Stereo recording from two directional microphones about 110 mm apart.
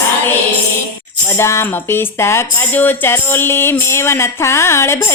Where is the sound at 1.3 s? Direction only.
25° left (ahead or behind).